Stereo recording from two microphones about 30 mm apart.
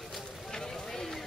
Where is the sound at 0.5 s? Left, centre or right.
Centre.